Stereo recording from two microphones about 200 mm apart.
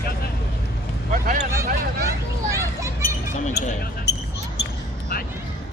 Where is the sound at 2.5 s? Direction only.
15° right (ahead or behind).